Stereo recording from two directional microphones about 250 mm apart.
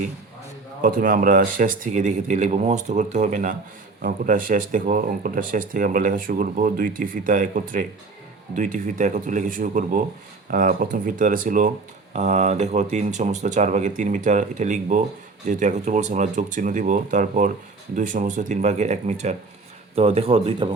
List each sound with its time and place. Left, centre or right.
0.8 s speech: right